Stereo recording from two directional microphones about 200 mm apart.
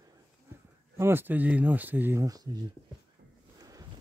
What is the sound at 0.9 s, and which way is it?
Speech, 10° right (ahead or behind).